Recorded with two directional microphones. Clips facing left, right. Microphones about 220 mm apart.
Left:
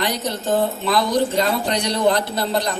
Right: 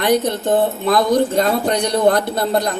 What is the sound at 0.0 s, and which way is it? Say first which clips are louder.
Speech: right 7 dB; 55° right (ahead or behind).